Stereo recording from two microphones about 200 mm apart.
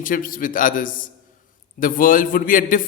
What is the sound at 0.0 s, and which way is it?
A man's voice, 45° left (ahead or behind).